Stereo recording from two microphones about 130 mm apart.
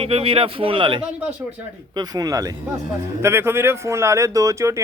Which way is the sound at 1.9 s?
30° right (ahead or behind).